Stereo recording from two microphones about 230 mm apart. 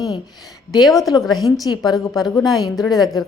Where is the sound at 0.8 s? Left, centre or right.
Centre.